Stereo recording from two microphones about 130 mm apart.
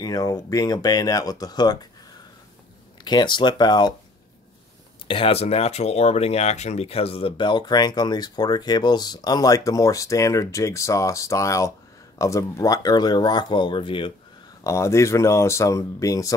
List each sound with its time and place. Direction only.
0.0 s speech: 30° left (ahead or behind)
3.0 s speech: 35° left (ahead or behind)
5.0 s speech: 45° left (ahead or behind)
14.6 s speech: 25° left (ahead or behind)